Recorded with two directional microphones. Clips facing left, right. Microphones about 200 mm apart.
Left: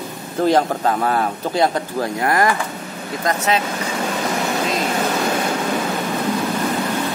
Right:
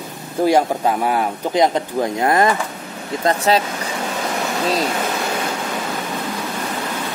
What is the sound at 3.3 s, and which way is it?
Speech, 35° right (ahead or behind).